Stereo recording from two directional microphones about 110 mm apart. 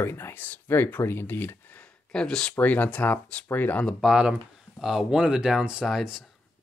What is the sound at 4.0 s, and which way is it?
Speech, 5° right (ahead or behind).